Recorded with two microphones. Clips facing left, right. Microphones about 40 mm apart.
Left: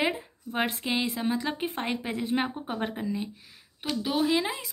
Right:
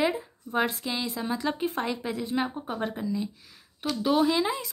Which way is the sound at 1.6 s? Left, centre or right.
Left.